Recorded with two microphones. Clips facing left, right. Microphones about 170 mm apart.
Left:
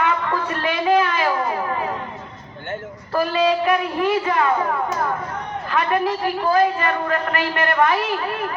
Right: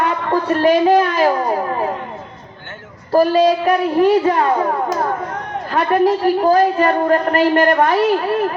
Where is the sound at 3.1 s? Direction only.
35° right (ahead or behind).